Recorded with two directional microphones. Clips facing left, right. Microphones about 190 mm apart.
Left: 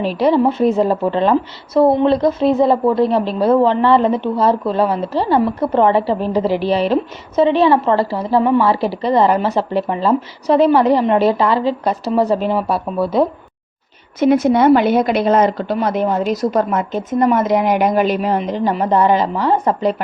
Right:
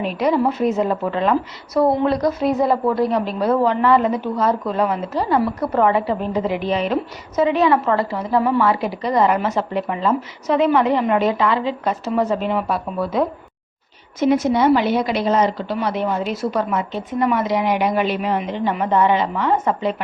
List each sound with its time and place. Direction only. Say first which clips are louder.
0.0 s a woman's voice: left 4 dB; 30° left (ahead or behind)
14.2 s speech: left 4 dB; 55° left (ahead or behind); by 20.0 s 40° left (ahead or behind)